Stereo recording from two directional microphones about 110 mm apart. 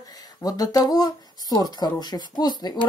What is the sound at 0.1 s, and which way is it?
Speech, 35° left (ahead or behind).